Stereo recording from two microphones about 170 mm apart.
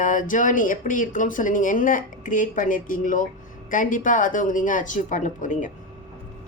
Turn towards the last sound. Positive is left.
turn(degrees=50)  # may be behind; listen again after turning